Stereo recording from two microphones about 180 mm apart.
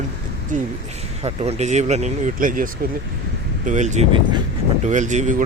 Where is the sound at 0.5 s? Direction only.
45° right (ahead or behind).